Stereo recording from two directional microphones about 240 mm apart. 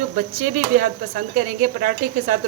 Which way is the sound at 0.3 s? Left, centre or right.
Right.